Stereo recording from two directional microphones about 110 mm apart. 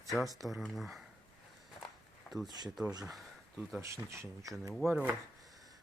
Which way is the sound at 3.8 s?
25° right (ahead or behind).